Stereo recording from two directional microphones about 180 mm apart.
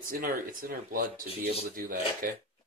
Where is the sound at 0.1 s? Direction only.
50° right (ahead or behind).